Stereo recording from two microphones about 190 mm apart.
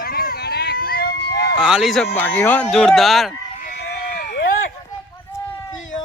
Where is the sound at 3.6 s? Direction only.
55° left (ahead or behind).